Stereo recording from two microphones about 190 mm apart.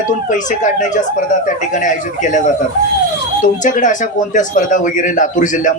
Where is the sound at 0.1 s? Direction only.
40° left (ahead or behind).